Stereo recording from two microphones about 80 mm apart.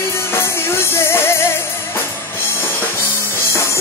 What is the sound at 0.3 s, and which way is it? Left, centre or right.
Music, left.